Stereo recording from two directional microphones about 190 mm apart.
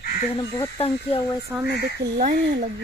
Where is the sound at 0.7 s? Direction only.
30° left (ahead or behind).